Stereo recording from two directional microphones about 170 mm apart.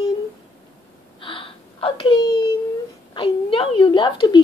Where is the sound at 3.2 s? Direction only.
30° left (ahead or behind).